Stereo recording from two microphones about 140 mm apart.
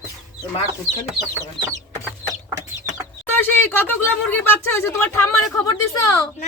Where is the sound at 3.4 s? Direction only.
15° left (ahead or behind).